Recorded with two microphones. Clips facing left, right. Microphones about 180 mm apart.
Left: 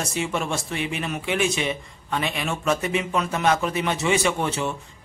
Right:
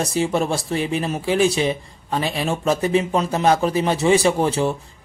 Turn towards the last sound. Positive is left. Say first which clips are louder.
# right 6 dB
turn(degrees=-35)  # may be behind; listen again after turning